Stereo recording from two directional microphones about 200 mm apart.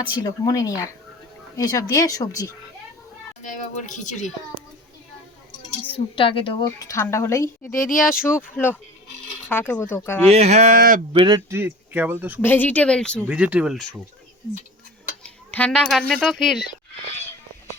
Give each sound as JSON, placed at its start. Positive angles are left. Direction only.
{"t": 0.2, "sound": "a woman's voice", "side_deg": 15}
{"t": 3.4, "sound": "speech", "side_deg": 40}
{"t": 5.9, "sound": "a woman's voice", "side_deg": 25}
{"t": 7.8, "sound": "speech", "side_deg": 40}
{"t": 8.2, "sound": "a woman's voice", "side_deg": 10}
{"t": 10.3, "sound": "speech", "side_deg": -35}
{"t": 11.1, "sound": "speech", "side_deg": -25}
{"t": 12.4, "sound": "a woman's voice", "side_deg": 10}
{"t": 13.2, "sound": "speech", "side_deg": -5}
{"t": 15.2, "sound": "speech", "side_deg": 5}